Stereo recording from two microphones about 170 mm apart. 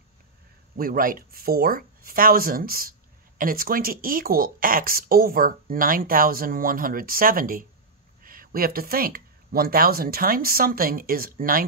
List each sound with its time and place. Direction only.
0.7 s speech: 55° right (ahead or behind)